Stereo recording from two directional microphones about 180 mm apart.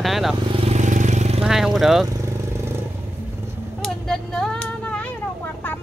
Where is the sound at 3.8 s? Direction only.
Centre (ahead or behind).